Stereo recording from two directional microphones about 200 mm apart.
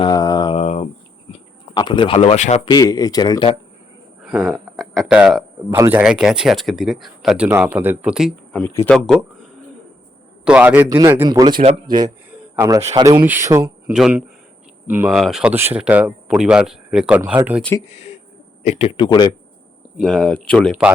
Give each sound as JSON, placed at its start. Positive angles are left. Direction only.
{"t": 0.0, "sound": "mantra", "side_deg": 20}
{"t": 0.6, "sound": "cricket", "side_deg": 35}
{"t": 1.3, "sound": "speech", "side_deg": 25}
{"t": 2.6, "sound": "speech", "side_deg": 20}
{"t": 4.2, "sound": "speech", "side_deg": -5}
{"t": 8.6, "sound": "speech", "side_deg": 15}
{"t": 8.9, "sound": "speech", "side_deg": 0}
{"t": 10.4, "sound": "a man's voice", "side_deg": -5}
{"t": 11.5, "sound": "speech", "side_deg": -35}
{"t": 11.9, "sound": "a man's voice", "side_deg": -20}
{"t": 17.8, "sound": "speech", "side_deg": 35}
{"t": 20.0, "sound": "speech", "side_deg": 5}